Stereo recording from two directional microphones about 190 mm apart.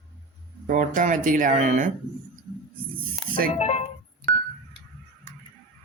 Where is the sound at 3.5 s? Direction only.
35° left (ahead or behind).